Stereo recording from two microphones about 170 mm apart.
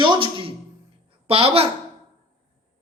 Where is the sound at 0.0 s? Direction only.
30° right (ahead or behind).